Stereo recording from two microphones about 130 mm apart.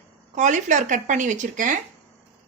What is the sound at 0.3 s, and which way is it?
Speech, 70° right (ahead or behind).